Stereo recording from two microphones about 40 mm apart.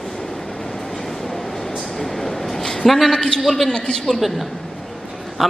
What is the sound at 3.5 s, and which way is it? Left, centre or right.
Speech, centre.